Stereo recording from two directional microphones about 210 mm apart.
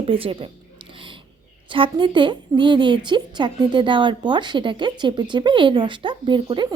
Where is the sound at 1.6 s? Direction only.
25° right (ahead or behind).